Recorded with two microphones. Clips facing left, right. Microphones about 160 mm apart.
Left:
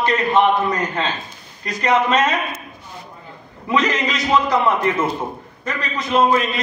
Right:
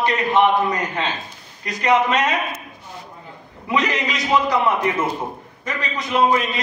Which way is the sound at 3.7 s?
15° right (ahead or behind).